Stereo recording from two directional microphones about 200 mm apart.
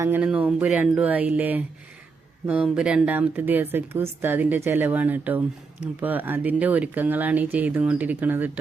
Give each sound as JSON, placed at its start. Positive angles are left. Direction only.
{"t": 0.0, "sound": "speech", "side_deg": -10}